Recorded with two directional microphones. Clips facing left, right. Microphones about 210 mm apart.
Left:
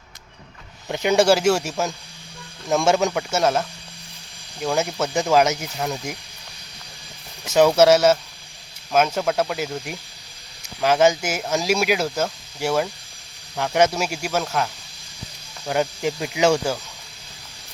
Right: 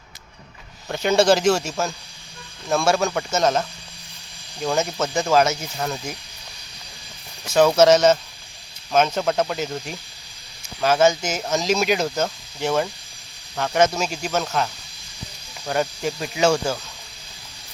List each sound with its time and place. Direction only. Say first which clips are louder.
0.9 s speech: even; 15° left (ahead or behind)
7.4 s speech: even; 15° left (ahead or behind)
15.6 s speech: left 1 dB; 15° left (ahead or behind)